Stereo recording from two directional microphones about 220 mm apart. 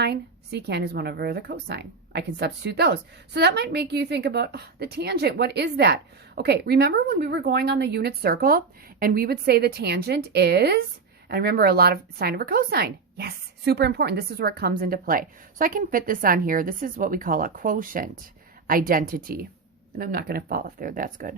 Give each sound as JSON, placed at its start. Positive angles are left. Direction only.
{"t": 0.0, "sound": "a woman's voice", "side_deg": -50}